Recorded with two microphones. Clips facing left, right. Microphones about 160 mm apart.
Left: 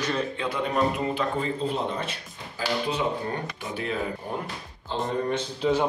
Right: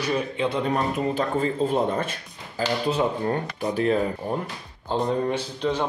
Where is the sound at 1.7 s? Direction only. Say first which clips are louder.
Right 5 dB; 50° right (ahead or behind).